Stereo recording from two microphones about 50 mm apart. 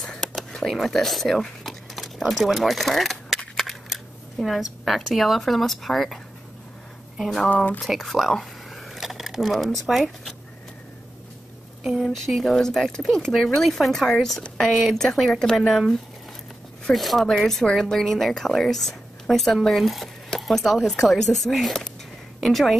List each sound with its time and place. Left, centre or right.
0.0 s a sound: centre
3.5 s speech: centre
7.4 s speech: left
7.8 s speech: centre
12.0 s a woman's voice: centre